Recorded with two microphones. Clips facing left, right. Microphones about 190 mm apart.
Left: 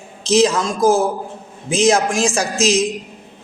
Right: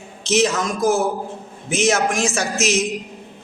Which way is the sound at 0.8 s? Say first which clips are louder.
Left 4 dB; 90° left.